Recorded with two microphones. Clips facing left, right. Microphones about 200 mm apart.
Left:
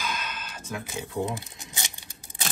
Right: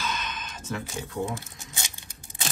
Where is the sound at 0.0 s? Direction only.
10° left (ahead or behind).